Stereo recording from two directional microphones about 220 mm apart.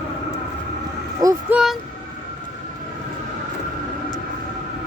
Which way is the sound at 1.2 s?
15° right (ahead or behind).